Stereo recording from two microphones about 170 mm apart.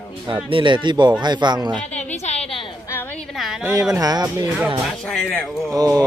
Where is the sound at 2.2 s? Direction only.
40° left (ahead or behind).